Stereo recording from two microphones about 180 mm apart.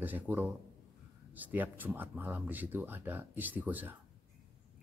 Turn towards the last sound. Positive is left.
turn(degrees=-10)  # may be behind; listen again after turning